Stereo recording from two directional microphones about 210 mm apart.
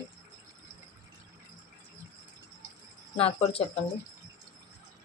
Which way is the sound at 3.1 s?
30° left (ahead or behind).